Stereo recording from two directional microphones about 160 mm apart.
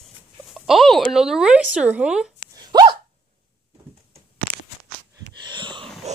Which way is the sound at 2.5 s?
25° right (ahead or behind).